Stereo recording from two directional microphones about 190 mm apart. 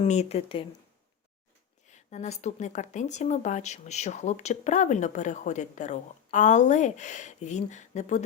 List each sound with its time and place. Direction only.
0.0 s speech: 35° left (ahead or behind)
1.9 s speech: 35° left (ahead or behind)